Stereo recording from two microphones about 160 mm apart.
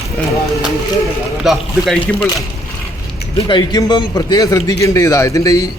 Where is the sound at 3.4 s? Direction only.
25° left (ahead or behind).